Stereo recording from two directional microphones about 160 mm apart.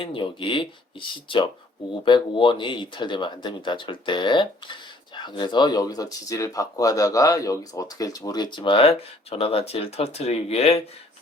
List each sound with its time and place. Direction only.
0.0 s speech: 35° left (ahead or behind)